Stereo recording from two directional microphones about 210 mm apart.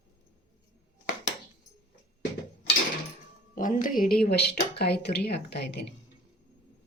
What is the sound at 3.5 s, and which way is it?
Speech, 40° left (ahead or behind).